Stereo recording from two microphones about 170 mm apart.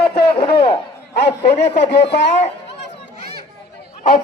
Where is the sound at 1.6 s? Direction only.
90° left.